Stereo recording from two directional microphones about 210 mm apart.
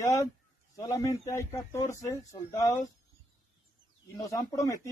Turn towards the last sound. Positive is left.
turn(degrees=15)  # may be behind; listen again after turning